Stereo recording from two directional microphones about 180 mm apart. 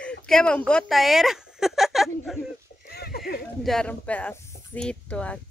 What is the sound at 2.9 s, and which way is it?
Horse, 60° left (ahead or behind).